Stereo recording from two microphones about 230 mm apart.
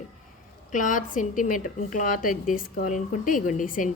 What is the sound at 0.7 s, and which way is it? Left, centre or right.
Speech, left.